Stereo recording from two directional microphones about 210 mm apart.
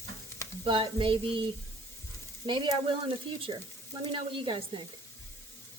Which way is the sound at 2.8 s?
25° right (ahead or behind).